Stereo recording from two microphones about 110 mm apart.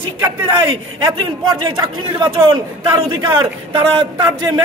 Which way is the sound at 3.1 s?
45° right (ahead or behind).